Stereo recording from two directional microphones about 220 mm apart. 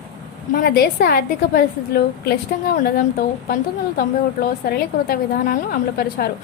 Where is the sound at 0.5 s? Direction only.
45° left (ahead or behind).